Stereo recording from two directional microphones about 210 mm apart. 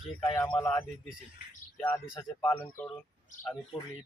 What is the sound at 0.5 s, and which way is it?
Speech, 10° left (ahead or behind).